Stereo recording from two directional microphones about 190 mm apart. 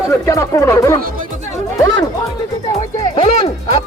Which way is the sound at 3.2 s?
30° left (ahead or behind).